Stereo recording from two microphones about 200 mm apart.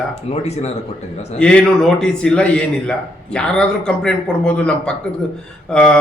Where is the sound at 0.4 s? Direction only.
30° left (ahead or behind).